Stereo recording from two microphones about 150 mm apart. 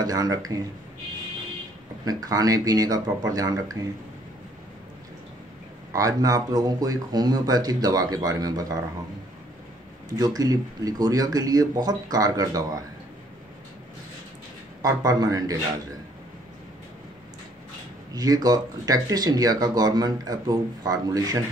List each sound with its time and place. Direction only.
0.0 s speech: 25° right (ahead or behind)
2.0 s speech: 25° right (ahead or behind)
5.9 s speech: 20° right (ahead or behind)
10.1 s speech: 25° right (ahead or behind)
14.8 s speech: 25° right (ahead or behind)
18.1 s speech: 25° right (ahead or behind)